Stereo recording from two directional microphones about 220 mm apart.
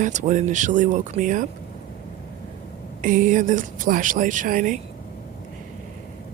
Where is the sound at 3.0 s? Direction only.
35° right (ahead or behind).